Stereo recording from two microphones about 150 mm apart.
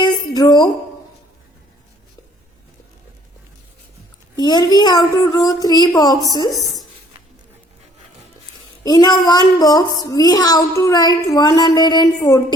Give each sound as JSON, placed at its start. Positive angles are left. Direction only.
{"t": 0.0, "sound": "music", "side_deg": 25}
{"t": 4.4, "sound": "speech", "side_deg": 30}
{"t": 6.5, "sound": "a woman's voice", "side_deg": 0}
{"t": 8.8, "sound": "speech", "side_deg": 25}